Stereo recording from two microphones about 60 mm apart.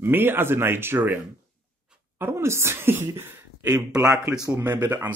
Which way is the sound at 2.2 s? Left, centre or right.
Right.